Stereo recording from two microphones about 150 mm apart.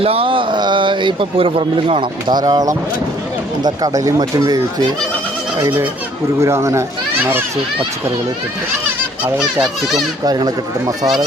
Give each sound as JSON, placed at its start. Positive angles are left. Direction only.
{"t": 0.0, "sound": "a man's voice", "side_deg": -40}
{"t": 10.2, "sound": "speech", "side_deg": -25}